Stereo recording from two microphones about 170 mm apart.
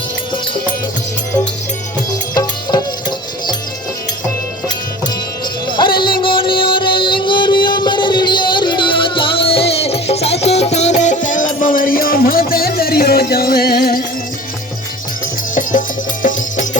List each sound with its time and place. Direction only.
2.3 s music: 20° left (ahead or behind)
6.2 s music: 30° left (ahead or behind); by 14.0 s 60° left (ahead or behind)